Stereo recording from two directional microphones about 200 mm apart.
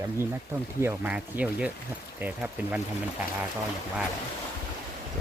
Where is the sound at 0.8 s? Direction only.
10° right (ahead or behind).